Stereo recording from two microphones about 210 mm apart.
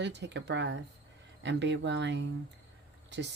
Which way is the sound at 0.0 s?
55° right (ahead or behind).